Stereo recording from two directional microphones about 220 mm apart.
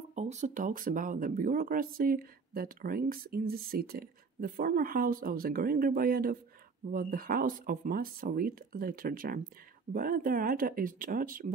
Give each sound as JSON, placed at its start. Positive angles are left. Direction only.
{"t": 0.1, "sound": "speech", "side_deg": -30}